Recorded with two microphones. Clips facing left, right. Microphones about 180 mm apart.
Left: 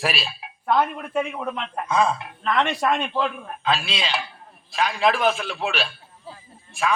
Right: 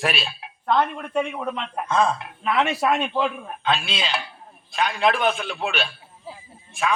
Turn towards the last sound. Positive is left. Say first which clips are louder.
# even
turn(degrees=0)  # may be behind; listen again after turning